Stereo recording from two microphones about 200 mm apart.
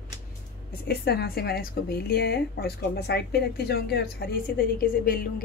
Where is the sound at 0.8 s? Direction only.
50° left (ahead or behind).